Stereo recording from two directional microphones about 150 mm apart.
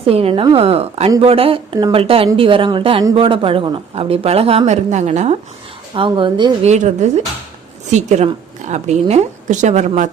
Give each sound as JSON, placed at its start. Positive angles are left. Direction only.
{"t": 0.0, "sound": "speech", "side_deg": -40}
{"t": 5.9, "sound": "speech", "side_deg": -35}
{"t": 6.6, "sound": "a woman's voice", "side_deg": -50}